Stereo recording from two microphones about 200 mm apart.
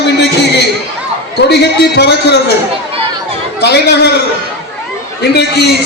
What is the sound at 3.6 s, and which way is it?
Speech, 55° left (ahead or behind).